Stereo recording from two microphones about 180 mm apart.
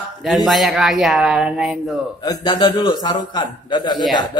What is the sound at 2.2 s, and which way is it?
Speech, 20° left (ahead or behind).